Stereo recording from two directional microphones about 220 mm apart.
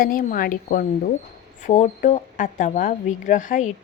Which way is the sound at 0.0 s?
40° left (ahead or behind).